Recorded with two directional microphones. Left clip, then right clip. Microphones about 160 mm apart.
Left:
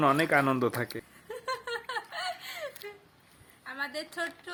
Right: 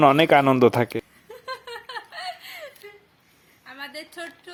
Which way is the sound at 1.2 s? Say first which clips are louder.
Even; centre (ahead or behind).